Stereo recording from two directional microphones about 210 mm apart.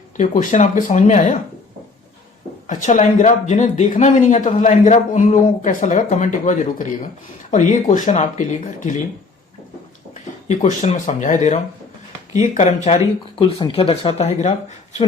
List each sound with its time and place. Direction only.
0.2 s speech: 35° left (ahead or behind)
2.6 s speech: 35° left (ahead or behind)
10.5 s speech: 35° left (ahead or behind)